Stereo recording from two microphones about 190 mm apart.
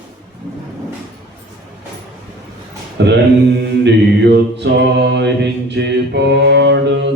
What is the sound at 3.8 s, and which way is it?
Mantra, 65° right (ahead or behind).